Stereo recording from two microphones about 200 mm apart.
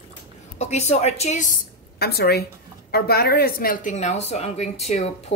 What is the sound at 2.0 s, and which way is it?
A woman's voice, 50° left (ahead or behind).